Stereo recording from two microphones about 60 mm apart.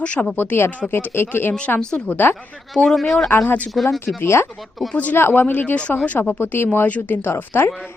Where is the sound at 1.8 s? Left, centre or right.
Centre.